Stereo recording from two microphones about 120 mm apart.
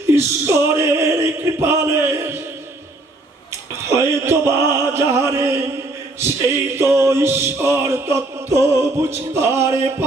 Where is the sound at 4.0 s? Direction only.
20° right (ahead or behind).